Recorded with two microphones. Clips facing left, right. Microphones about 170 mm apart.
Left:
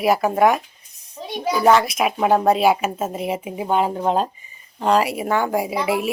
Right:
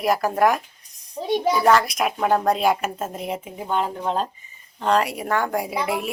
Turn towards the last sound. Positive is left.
turn(degrees=5)  # may be behind; listen again after turning